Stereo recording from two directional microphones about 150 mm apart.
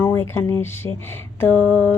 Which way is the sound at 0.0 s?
15° left (ahead or behind).